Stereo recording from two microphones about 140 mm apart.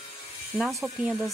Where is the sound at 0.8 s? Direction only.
20° right (ahead or behind).